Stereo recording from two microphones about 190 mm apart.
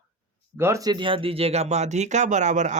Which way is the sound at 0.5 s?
15° right (ahead or behind).